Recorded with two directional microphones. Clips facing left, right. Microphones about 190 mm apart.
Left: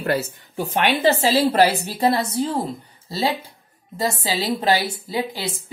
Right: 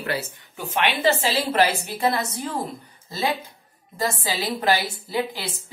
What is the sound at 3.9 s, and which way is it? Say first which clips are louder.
A woman's voice: left 3 dB; 25° left (ahead or behind).